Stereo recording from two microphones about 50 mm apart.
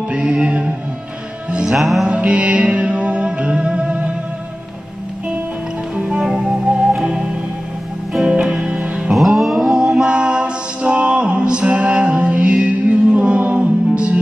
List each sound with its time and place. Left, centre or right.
0.1 s music: right
1.5 s music: centre
1.8 s music: centre
2.0 s music: right
5.9 s music: right
8.3 s music: centre
9.1 s a sound: centre
10.0 s music: right